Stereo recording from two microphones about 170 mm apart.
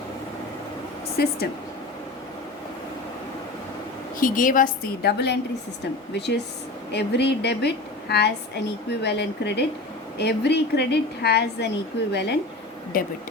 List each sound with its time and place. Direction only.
1.2 s a woman's voice: 70° left (ahead or behind)
4.2 s a woman's voice: 50° left (ahead or behind)
5.0 s a woman's voice: 75° left (ahead or behind)
11.9 s speech: 90° left
12.9 s speech: 60° left (ahead or behind)